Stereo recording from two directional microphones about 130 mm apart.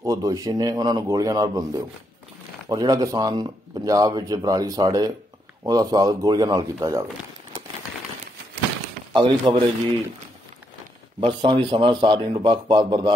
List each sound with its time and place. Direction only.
0.0 s speech: 25° right (ahead or behind)
9.1 s speech: 40° right (ahead or behind)
11.1 s speech: 40° right (ahead or behind)